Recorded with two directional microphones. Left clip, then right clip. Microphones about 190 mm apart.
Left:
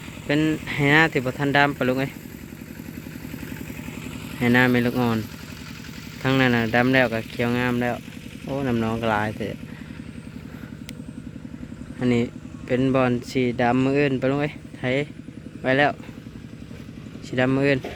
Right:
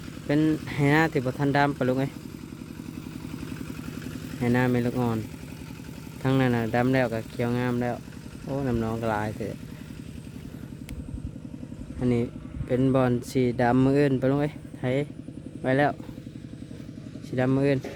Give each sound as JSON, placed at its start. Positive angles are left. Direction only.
{"t": 0.3, "sound": "speech", "side_deg": -10}
{"t": 4.4, "sound": "speech", "side_deg": -5}
{"t": 6.2, "sound": "speech", "side_deg": -5}
{"t": 11.9, "sound": "speech", "side_deg": -5}
{"t": 17.3, "sound": "speech", "side_deg": -5}